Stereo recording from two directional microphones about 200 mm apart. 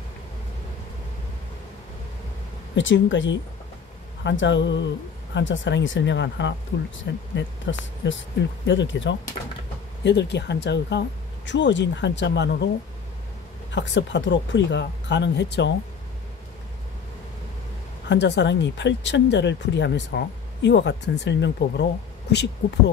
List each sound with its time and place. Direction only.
2.7 s speech: 70° left (ahead or behind)
13.7 s speech: 65° left (ahead or behind)
18.0 s speech: 60° left (ahead or behind)